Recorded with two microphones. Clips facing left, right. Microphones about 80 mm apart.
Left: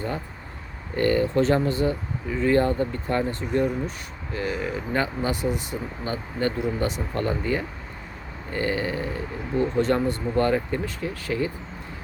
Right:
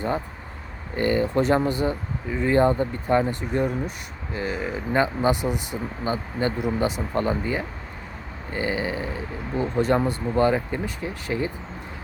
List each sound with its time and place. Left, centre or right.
0.9 s speech: centre